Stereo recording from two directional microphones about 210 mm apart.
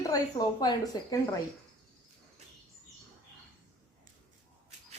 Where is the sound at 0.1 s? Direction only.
20° left (ahead or behind).